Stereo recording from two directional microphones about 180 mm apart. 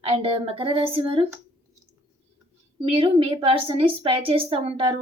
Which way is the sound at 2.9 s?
30° right (ahead or behind).